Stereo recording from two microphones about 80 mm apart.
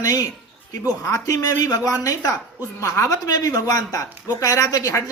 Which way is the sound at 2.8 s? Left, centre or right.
Left.